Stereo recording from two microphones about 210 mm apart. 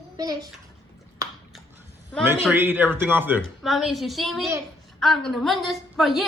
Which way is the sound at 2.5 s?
10° right (ahead or behind).